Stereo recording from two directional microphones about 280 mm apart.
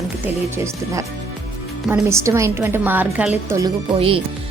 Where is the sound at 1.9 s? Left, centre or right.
Centre.